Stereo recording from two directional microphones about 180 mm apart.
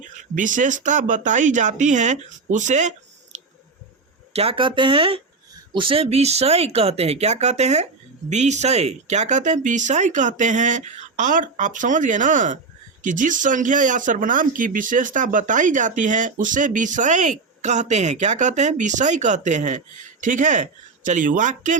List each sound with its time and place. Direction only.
0.3 s speech: 45° right (ahead or behind)
3.3 s a sound: 40° right (ahead or behind)
4.3 s speech: 35° right (ahead or behind)